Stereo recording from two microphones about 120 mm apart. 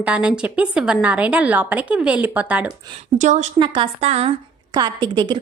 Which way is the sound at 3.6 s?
45° right (ahead or behind).